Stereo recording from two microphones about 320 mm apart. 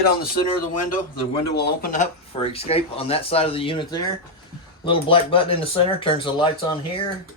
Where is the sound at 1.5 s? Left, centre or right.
Left.